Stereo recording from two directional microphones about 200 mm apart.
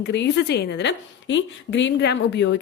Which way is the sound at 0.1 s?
60° left (ahead or behind).